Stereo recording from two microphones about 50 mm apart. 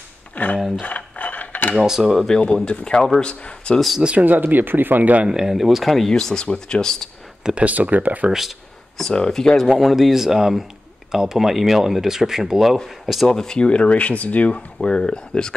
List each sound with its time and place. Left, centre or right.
0.4 s speech: left
0.7 s mechanisms: left
1.8 s speech: centre
2.2 s speech: centre
4.0 s speech: right
4.3 s speech: right
5.2 s speech: centre
7.4 s speech: right
8.3 s speech: centre
8.9 s speech: centre
13.3 s speech: centre